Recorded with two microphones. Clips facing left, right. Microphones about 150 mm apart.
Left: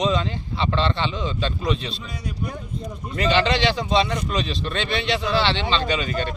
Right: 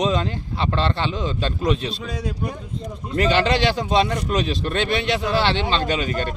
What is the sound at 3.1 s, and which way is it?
Speech, 45° right (ahead or behind).